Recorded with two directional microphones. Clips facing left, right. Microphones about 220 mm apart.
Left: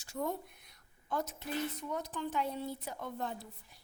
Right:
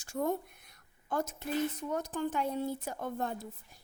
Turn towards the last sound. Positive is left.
turn(degrees=-50)  # may be behind; listen again after turning